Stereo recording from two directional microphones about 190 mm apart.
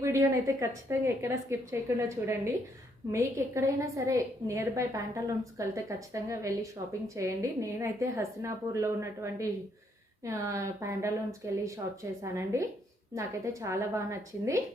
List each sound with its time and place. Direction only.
0.0 s a woman's voice: 15° right (ahead or behind)